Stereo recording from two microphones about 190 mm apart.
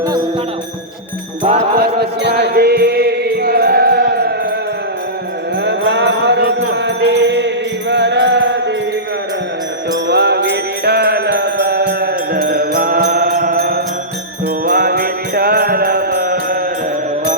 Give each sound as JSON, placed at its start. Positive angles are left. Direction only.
{"t": 1.8, "sound": "mantra", "side_deg": -60}
{"t": 5.6, "sound": "music", "side_deg": -65}
{"t": 9.9, "sound": "music", "side_deg": -60}